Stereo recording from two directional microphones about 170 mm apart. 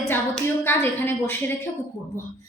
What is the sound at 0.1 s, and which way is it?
A woman's voice, 15° left (ahead or behind).